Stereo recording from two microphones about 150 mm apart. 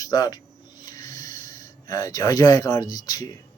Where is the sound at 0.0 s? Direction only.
25° left (ahead or behind).